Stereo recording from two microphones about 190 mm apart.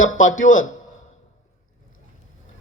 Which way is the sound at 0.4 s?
45° left (ahead or behind).